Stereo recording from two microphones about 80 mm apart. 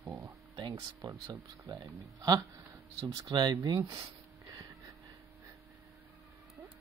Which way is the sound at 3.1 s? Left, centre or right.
Right.